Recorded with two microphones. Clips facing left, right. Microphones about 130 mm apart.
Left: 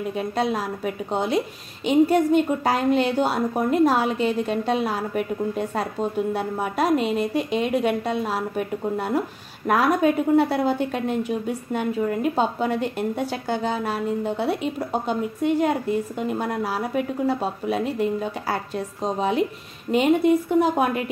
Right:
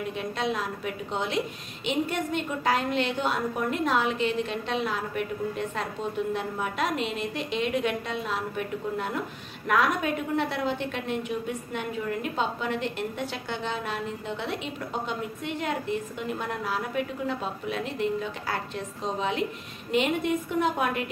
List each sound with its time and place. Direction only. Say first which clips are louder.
0.2 s a woman's voice: left 6 dB; 40° left (ahead or behind)